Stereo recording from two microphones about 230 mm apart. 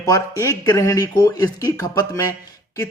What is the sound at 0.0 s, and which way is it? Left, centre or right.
Speech, centre.